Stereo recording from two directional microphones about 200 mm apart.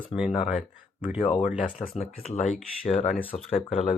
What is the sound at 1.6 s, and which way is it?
Speech, 35° left (ahead or behind).